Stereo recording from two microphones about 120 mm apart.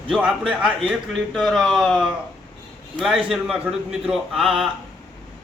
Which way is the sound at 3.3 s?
Centre (ahead or behind).